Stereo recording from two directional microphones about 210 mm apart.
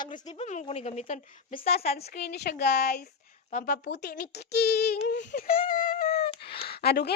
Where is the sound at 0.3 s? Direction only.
35° left (ahead or behind).